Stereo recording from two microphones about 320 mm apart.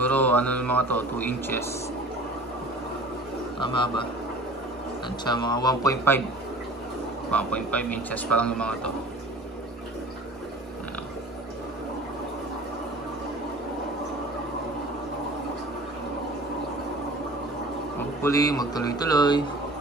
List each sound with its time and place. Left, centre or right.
0.0 s speech: centre
3.5 s speech: centre
5.2 s speech: centre
7.2 s speech: centre
18.2 s speech: centre